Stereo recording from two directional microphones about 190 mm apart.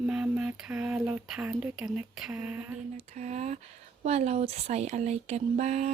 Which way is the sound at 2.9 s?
35° right (ahead or behind).